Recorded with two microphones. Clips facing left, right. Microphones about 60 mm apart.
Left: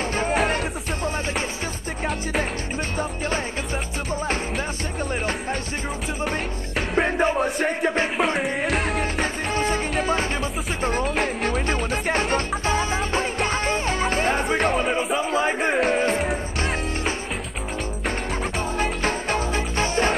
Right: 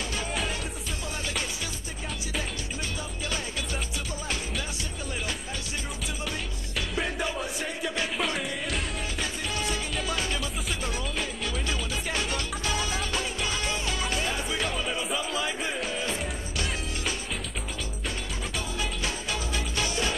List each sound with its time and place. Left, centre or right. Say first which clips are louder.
0.3 s music: left 12 dB; left
4.1 s music: left 10 dB; left
7.0 s music: left 11 dB; left
8.6 s music: left 9 dB; left
9.2 s music: left 5 dB; left
18.8 s music: left 10 dB; left